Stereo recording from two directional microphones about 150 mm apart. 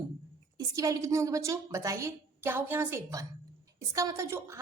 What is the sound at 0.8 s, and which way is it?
A woman's voice, 20° right (ahead or behind).